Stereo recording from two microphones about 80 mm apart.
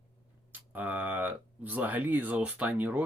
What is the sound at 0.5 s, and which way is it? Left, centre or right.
Speech, right.